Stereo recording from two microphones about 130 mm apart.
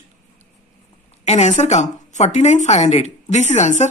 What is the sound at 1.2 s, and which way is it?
A woman's voice, 60° left (ahead or behind).